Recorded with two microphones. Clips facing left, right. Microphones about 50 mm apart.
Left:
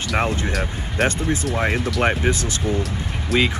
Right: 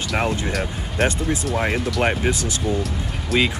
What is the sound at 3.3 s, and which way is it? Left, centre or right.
Speech, centre.